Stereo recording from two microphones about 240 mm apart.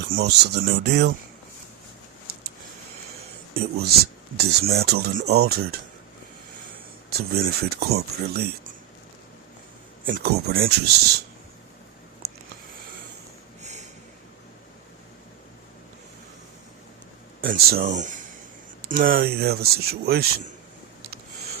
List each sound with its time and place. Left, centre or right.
0.2 s speech: right
2.3 s a sound: right
3.5 s speech: right
7.1 s speech: right
10.1 s speech: right
13.6 s a sound: right
17.4 s speech: right